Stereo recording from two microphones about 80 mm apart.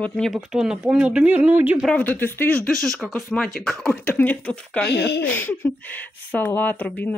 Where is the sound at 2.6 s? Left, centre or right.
Centre.